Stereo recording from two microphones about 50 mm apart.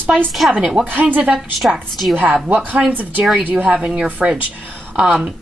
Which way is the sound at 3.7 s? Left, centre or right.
Centre.